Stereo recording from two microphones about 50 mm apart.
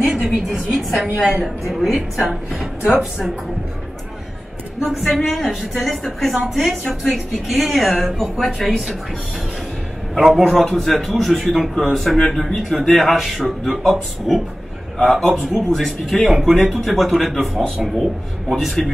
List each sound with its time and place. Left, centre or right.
0.0 s a sound: right
0.7 s a man's voice: centre
4.8 s a man's voice: centre
7.1 s a man's voice: centre
10.1 s speech: centre
10.5 s a man's voice: centre
15.3 s speech: centre
15.7 s a man's voice: centre
16.3 s speech: centre
16.7 s a man's voice: centre